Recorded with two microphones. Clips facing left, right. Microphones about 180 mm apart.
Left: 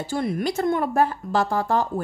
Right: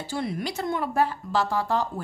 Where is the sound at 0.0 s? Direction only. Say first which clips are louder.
Left 5 dB; 50° left (ahead or behind).